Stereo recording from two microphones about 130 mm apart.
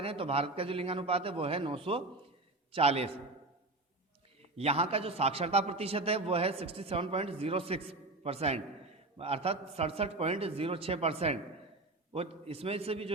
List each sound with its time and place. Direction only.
0.0 s a man's voice: 50° right (ahead or behind)
4.5 s a man's voice: 50° right (ahead or behind)